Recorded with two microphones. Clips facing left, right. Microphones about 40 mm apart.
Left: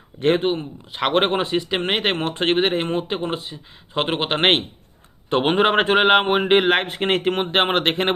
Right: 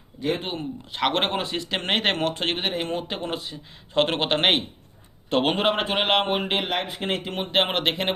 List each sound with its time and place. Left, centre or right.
0.2 s speech: left
0.9 s speech: centre
2.1 s speech: left
5.7 s speech: left
6.0 s speech: left
6.7 s speech: left
7.4 s speech: left